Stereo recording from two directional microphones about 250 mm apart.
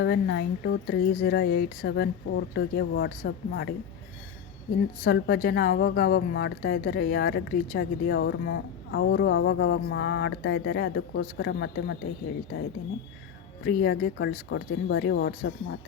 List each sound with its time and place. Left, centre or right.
0.0 s a woman's voice: left
5.0 s a woman's voice: left
13.7 s a woman's voice: left